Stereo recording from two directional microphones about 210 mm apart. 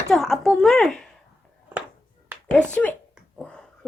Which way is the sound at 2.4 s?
5° left (ahead or behind).